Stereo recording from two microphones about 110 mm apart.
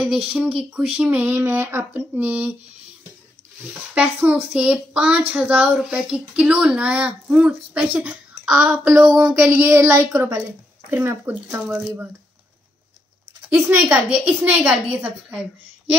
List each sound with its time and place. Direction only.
0.3 s speech: 10° right (ahead or behind)
3.9 s speech: 15° right (ahead or behind)
9.2 s a woman's voice: 20° right (ahead or behind)
13.6 s speech: 15° right (ahead or behind)